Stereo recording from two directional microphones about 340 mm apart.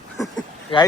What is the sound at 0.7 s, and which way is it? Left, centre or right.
Speech, centre.